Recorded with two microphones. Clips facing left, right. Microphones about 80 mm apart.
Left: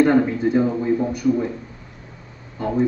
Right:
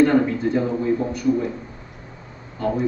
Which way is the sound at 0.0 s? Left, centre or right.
Centre.